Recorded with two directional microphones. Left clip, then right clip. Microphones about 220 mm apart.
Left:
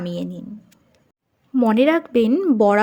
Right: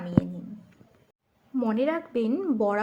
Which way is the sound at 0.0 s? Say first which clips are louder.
Even; 35° left (ahead or behind).